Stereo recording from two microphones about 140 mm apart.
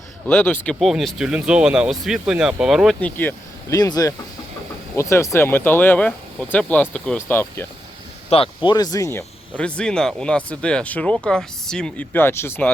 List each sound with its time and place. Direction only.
0.3 s speech: 10° left (ahead or behind)
3.0 s speech: 15° left (ahead or behind)
3.7 s speech: 25° left (ahead or behind)
8.3 s speech: 40° left (ahead or behind)
8.7 s speech: 30° left (ahead or behind)